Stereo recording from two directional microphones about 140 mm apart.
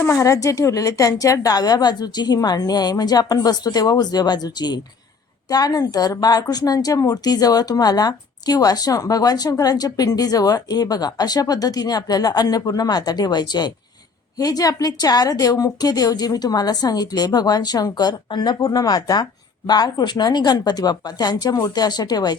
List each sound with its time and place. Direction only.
0.0 s a woman's voice: 20° left (ahead or behind)